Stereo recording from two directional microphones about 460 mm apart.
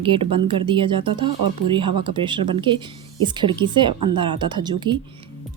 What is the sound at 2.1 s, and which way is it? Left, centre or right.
Speech, centre.